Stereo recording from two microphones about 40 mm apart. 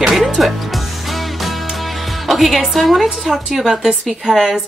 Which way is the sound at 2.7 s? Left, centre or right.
Centre.